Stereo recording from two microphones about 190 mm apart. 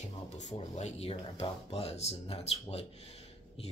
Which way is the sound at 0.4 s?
35° left (ahead or behind).